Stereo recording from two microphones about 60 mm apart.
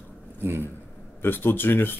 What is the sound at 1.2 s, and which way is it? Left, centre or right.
Speech, left.